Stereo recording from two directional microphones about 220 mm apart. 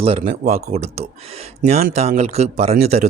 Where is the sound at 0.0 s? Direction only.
25° right (ahead or behind).